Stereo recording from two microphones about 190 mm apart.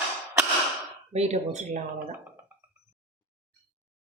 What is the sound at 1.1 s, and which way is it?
A woman's voice, 35° right (ahead or behind).